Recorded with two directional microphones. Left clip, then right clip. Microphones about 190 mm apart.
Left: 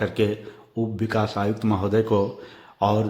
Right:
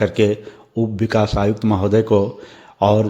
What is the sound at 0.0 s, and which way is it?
A man's voice, 25° right (ahead or behind).